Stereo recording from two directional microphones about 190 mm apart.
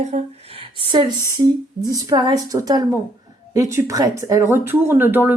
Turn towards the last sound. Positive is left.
turn(degrees=-10)  # may be behind; listen again after turning